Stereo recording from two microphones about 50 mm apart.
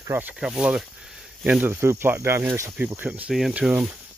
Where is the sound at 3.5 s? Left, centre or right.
Right.